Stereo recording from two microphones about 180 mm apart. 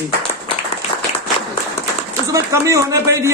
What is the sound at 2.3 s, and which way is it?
Speech, 15° right (ahead or behind).